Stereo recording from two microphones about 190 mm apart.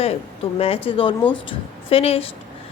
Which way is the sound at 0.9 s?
25° left (ahead or behind).